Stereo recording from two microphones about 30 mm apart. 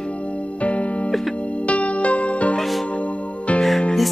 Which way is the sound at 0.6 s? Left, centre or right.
Left.